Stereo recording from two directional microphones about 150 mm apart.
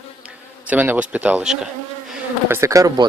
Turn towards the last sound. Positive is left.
turn(degrees=-25)  # may be behind; listen again after turning